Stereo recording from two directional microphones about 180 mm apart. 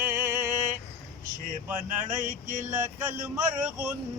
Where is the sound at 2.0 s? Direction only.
45° right (ahead or behind).